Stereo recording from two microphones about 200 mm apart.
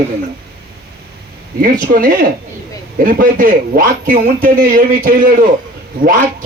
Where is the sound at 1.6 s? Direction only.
40° right (ahead or behind).